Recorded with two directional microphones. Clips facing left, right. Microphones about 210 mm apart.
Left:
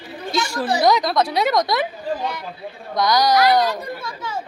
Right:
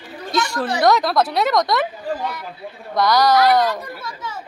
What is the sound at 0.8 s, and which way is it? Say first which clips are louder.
Speech: right 2 dB; centre (ahead or behind).